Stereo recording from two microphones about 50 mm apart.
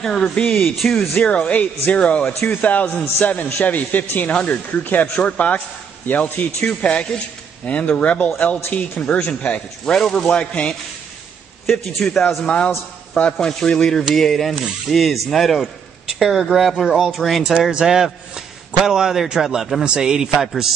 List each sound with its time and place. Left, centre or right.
0.0 s speech: centre
0.7 s speech: centre
0.9 s speech: left
6.8 s speech: left
10.3 s speech: left
11.7 s speech: centre
12.4 s speech: left; by 15.6 s centre
15.6 s a sound: centre
16.5 s speech: centre
17.6 s a man's voice: centre
19.8 s a man's voice: centre